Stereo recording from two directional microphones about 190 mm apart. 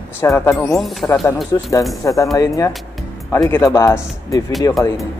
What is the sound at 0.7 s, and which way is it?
Speech, centre (ahead or behind).